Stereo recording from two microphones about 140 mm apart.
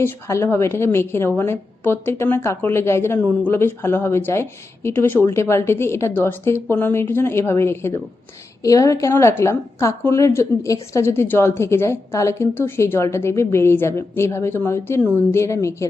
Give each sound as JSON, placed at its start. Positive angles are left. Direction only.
{"t": 0.0, "sound": "a woman's voice", "side_deg": 20}